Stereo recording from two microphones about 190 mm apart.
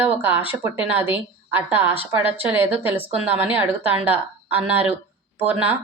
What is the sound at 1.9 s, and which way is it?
Speech, 30° left (ahead or behind).